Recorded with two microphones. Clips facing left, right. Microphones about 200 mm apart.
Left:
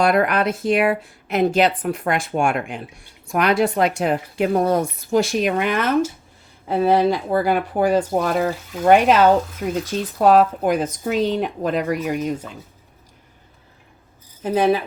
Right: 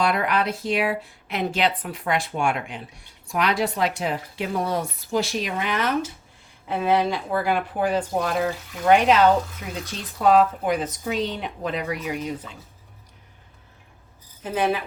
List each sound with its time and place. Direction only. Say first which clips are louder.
0.0 s speech: left 5 dB; 50° left (ahead or behind)
6.7 s speech: left 5 dB; 40° left (ahead or behind)
14.4 s speech: left 6 dB; 40° left (ahead or behind)